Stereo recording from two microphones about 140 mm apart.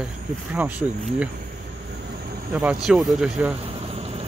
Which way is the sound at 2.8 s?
5° right (ahead or behind).